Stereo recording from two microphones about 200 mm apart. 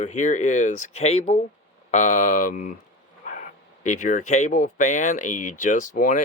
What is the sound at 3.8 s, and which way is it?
Speech, 40° left (ahead or behind).